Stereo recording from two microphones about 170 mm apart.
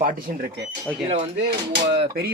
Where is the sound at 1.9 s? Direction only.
65° right (ahead or behind).